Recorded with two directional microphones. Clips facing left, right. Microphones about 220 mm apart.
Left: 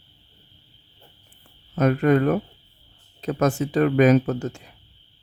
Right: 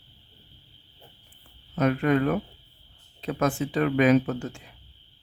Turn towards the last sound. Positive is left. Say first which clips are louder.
# left 2 dB
turn(degrees=40)  # may be behind; listen again after turning